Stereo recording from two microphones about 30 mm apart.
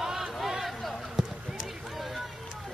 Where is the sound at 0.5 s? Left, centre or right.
Centre.